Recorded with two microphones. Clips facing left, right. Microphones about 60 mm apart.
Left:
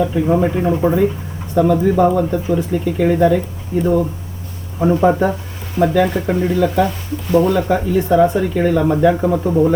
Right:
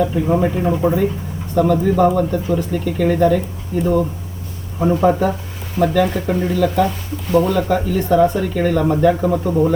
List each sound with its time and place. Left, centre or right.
0.3 s speech: centre
4.8 s speech: centre